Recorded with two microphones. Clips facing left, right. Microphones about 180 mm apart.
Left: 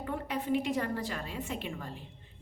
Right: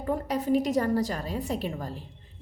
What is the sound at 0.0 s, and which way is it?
A woman's voice, 40° right (ahead or behind).